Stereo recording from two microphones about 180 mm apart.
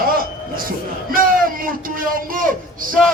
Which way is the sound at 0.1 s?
55° right (ahead or behind).